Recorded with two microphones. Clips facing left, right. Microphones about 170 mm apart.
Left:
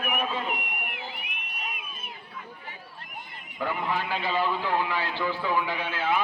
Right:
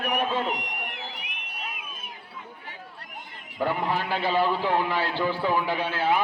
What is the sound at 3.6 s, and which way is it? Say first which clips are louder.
A man's voice: right 3 dB; 35° right (ahead or behind).